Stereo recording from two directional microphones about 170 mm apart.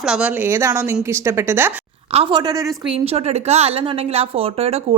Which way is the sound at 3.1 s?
40° right (ahead or behind).